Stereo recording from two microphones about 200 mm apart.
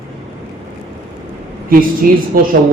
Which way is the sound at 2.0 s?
45° right (ahead or behind).